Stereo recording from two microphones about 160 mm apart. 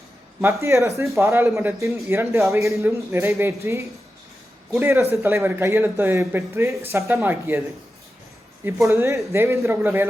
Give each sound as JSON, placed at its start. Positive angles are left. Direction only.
{"t": 0.4, "sound": "speech", "side_deg": -15}
{"t": 8.6, "sound": "speech", "side_deg": -15}